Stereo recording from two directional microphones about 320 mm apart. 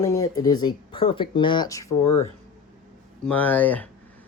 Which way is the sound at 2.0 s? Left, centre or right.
Left.